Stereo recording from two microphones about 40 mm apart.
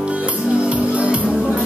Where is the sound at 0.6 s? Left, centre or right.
Right.